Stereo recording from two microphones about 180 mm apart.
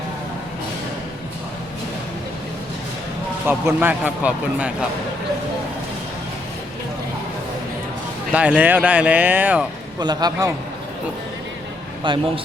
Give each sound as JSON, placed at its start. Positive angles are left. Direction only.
{"t": 3.4, "sound": "speech", "side_deg": -10}
{"t": 8.3, "sound": "speech", "side_deg": -5}
{"t": 10.0, "sound": "a man's voice", "side_deg": -25}
{"t": 12.1, "sound": "a man's voice", "side_deg": -25}